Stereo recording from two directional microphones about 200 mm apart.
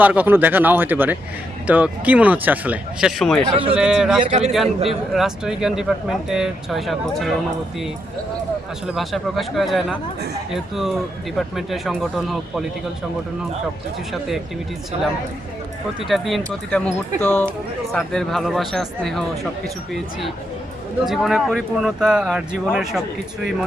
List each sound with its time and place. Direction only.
0.0 s speech: 10° right (ahead or behind)
4.3 s a man's voice: 35° right (ahead or behind)
4.9 s speech: centre (ahead or behind)
9.0 s speech: centre (ahead or behind)
14.1 s speech: centre (ahead or behind)
16.0 s speech: centre (ahead or behind)